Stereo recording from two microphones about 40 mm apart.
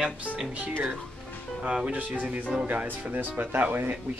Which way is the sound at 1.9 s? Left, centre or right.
Right.